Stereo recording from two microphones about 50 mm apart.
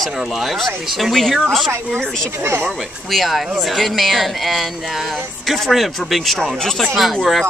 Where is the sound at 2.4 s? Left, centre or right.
Right.